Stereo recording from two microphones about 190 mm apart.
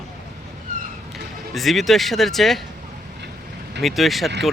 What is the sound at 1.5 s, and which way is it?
Speech, centre (ahead or behind).